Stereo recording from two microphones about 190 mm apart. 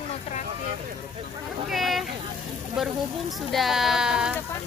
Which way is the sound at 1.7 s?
Centre (ahead or behind).